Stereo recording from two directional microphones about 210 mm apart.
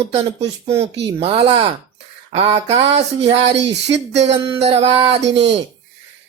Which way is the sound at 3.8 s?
55° right (ahead or behind).